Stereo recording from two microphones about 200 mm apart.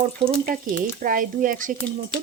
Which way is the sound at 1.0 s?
40° right (ahead or behind).